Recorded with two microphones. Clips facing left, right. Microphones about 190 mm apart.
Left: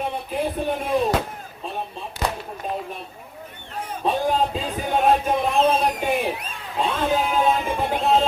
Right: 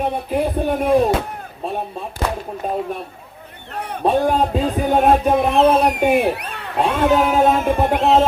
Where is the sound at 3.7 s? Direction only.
65° right (ahead or behind).